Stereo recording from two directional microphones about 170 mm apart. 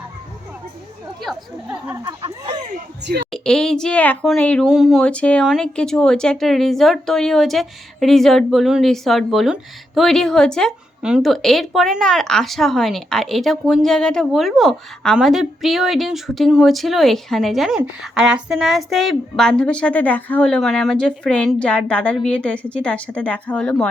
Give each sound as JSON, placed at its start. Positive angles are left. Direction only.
{"t": 1.2, "sound": "speech", "side_deg": -5}
{"t": 2.0, "sound": "speech", "side_deg": -20}
{"t": 3.3, "sound": "speech", "side_deg": 5}